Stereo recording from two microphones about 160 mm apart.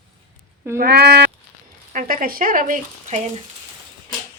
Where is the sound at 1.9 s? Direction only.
55° right (ahead or behind).